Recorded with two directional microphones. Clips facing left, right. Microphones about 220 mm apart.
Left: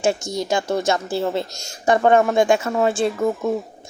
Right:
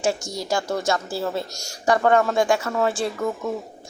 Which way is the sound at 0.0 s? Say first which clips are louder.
Left 4 dB; 20° left (ahead or behind).